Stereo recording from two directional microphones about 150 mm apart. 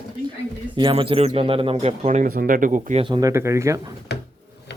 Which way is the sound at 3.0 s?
30° right (ahead or behind).